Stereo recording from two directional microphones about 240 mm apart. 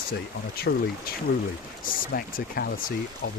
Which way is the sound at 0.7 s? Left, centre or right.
Left.